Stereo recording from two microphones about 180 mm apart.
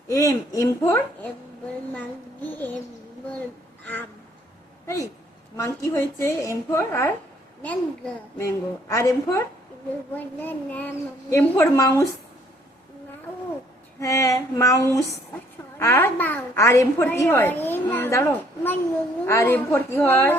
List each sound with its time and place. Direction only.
0.1 s a woman's voice: 15° left (ahead or behind)
5.5 s a woman's voice: 15° left (ahead or behind)
14.0 s a woman's voice: 15° left (ahead or behind)